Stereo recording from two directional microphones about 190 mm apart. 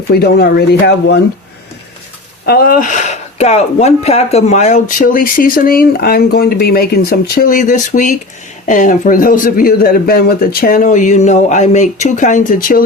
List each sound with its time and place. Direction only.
0.1 s speech: 55° left (ahead or behind)
2.5 s speech: 50° left (ahead or behind)